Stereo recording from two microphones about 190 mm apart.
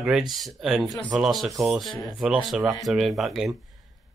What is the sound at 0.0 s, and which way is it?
Speech, centre (ahead or behind).